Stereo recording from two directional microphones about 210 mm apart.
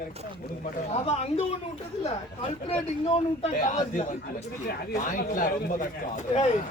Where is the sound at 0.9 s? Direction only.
30° left (ahead or behind).